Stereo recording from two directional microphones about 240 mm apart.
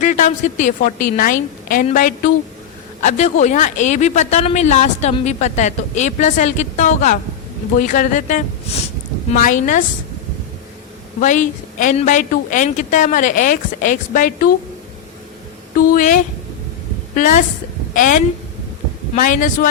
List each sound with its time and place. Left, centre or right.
0.0 s a woman's voice: left
11.2 s a woman's voice: left
15.7 s a woman's voice: left